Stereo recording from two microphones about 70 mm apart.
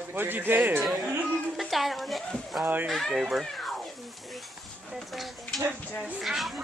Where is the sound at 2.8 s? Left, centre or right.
Centre.